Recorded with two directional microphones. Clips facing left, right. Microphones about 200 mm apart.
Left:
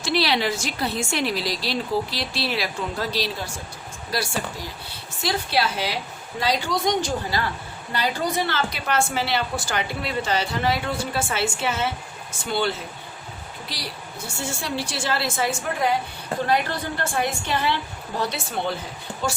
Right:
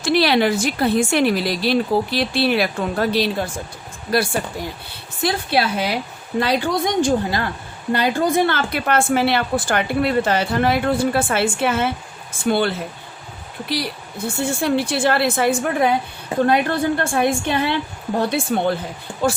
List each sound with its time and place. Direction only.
0.0 s a woman's voice: 55° right (ahead or behind)
14.4 s a woman's voice: 55° right (ahead or behind)